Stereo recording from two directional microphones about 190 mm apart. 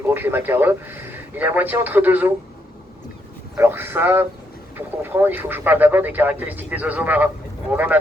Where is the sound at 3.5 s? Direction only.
10° right (ahead or behind).